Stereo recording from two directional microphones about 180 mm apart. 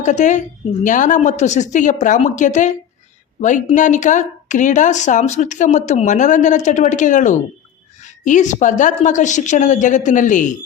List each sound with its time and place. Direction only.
0.0 s a woman's voice: 45° left (ahead or behind)
3.8 s a woman's voice: 45° left (ahead or behind)